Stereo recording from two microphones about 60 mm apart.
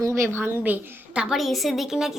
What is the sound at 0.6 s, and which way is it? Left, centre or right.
Speech, right.